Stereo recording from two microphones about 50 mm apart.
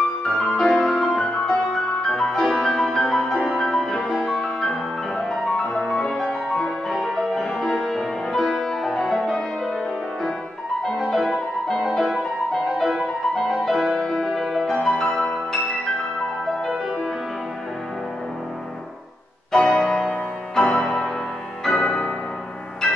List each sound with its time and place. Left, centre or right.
0.2 s music: centre
10.8 s music: centre
14.7 s music: centre
19.6 s music: centre